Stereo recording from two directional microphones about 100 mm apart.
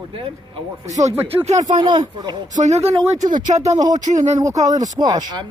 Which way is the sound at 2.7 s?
90° right.